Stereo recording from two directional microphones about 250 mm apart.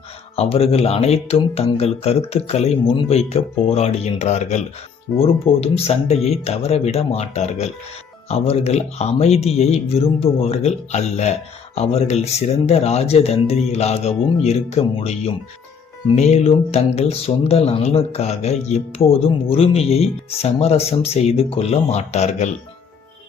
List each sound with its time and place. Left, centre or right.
0.3 s speech: left
16.1 s speech: left